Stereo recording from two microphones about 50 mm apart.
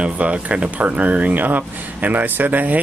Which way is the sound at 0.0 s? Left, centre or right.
Right.